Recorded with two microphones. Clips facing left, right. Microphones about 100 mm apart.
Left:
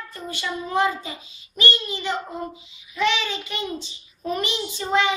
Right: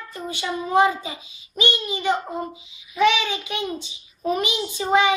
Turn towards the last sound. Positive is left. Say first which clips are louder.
# right 3 dB
turn(degrees=-15)  # may be behind; listen again after turning